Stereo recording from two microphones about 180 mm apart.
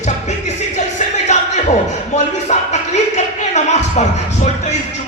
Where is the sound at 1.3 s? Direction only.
40° left (ahead or behind).